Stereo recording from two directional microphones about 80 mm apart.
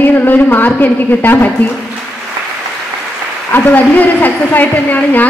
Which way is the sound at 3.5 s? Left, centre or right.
Left.